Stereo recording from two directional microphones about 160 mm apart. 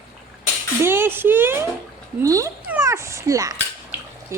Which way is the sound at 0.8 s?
15° right (ahead or behind).